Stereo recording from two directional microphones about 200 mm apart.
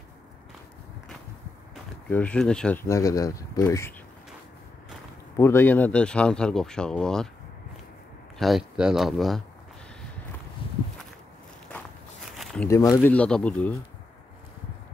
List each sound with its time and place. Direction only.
2.0 s speech: 10° left (ahead or behind)
5.4 s speech: 10° left (ahead or behind)
8.4 s speech: centre (ahead or behind)
10.6 s walk: 25° left (ahead or behind)
12.6 s speech: 15° left (ahead or behind)